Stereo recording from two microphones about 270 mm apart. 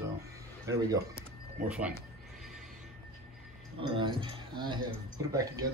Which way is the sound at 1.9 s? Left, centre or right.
Centre.